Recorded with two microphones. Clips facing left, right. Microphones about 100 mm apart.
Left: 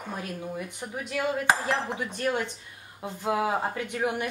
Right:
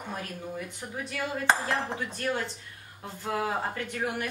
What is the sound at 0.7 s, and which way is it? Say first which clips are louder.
A woman's voice: left 3 dB; 15° left (ahead or behind).